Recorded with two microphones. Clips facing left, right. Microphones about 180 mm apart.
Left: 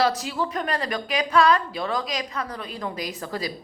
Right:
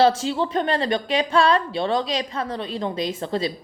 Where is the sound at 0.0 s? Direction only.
30° right (ahead or behind).